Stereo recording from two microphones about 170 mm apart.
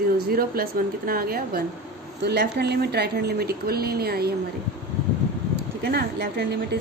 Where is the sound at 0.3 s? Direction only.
60° right (ahead or behind).